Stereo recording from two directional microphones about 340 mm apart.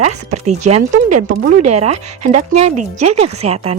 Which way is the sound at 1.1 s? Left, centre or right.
Right.